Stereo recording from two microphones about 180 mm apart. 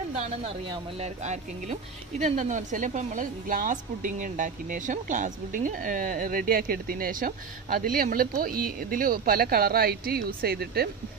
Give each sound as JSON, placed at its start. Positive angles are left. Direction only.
{"t": 0.1, "sound": "speech", "side_deg": -30}